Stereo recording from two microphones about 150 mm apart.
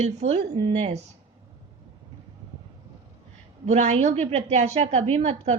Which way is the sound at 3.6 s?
50° right (ahead or behind).